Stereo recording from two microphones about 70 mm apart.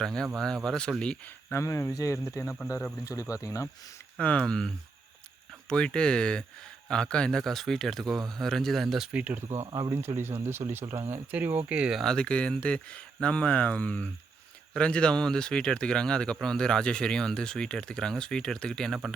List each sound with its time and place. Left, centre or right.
0.0 s speech: centre
1.5 s speech: left
3.4 s speech: left
4.2 s speech: centre
9.1 s speech: right
9.4 s speech: right
9.6 s speech: right
10.2 s speech: right
11.7 s speech: centre
12.0 s speech: centre